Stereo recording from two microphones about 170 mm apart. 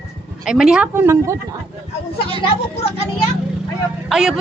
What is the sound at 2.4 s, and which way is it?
Speech, 35° left (ahead or behind).